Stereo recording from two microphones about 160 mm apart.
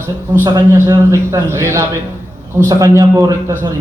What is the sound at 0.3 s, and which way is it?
A man's voice, 20° right (ahead or behind).